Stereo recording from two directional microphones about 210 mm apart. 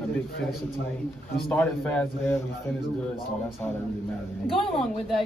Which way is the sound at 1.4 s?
5° left (ahead or behind).